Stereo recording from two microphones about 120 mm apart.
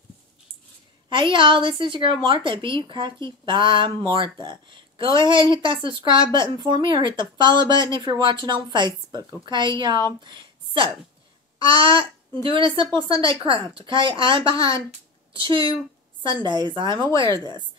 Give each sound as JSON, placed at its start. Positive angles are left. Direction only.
{"t": 1.0, "sound": "a woman's voice", "side_deg": -45}
{"t": 10.2, "sound": "a sound", "side_deg": -40}
{"t": 11.6, "sound": "a woman's voice", "side_deg": -45}